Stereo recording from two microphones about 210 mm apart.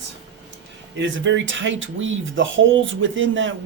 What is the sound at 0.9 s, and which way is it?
Speech, 60° right (ahead or behind).